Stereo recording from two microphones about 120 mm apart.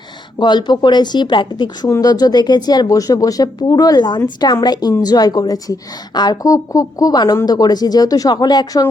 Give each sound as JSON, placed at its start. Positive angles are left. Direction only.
{"t": 0.3, "sound": "a woman's voice", "side_deg": 40}